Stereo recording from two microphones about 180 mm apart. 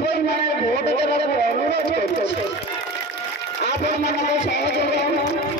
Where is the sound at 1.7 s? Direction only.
70° left (ahead or behind).